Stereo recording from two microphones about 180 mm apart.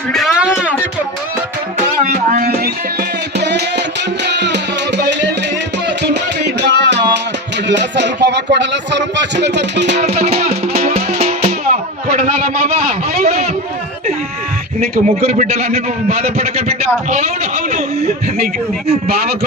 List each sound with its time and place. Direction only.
0.1 s music: centre (ahead or behind)
2.0 s music: 50° right (ahead or behind)
3.3 s music: 70° right (ahead or behind)
6.6 s music: 70° right (ahead or behind)
7.7 s speech: 75° right (ahead or behind)
10.2 s music: 35° right (ahead or behind)
12.2 s a sound: 35° right (ahead or behind)
14.8 s a man's voice: 35° right (ahead or behind)
19.0 s a man's voice: 60° right (ahead or behind)